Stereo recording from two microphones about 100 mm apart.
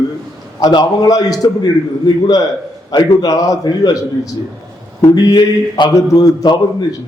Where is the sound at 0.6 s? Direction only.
45° left (ahead or behind).